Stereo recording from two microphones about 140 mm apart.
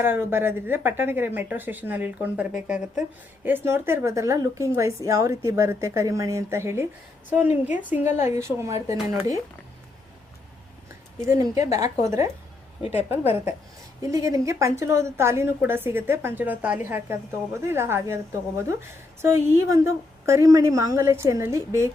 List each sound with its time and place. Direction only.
0.0 s a woman's voice: 15° right (ahead or behind)
3.4 s a woman's voice: 15° right (ahead or behind)
11.3 s a woman's voice: 25° right (ahead or behind)
12.8 s a woman's voice: 45° left (ahead or behind)
13.1 s a woman's voice: 15° right (ahead or behind)